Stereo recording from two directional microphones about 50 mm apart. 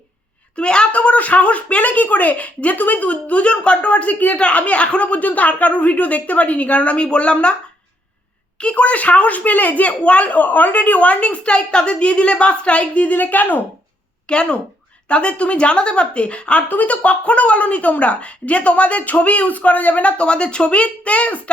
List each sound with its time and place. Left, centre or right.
0.5 s a woman's voice: centre
8.5 s a woman's voice: left
14.3 s a woman's voice: left